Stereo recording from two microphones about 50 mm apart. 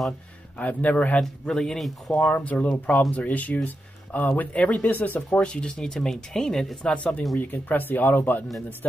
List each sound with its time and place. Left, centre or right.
0.6 s speech: left
1.5 s speech: centre
2.0 s speech: left; by 6.9 s centre
6.9 s speech: left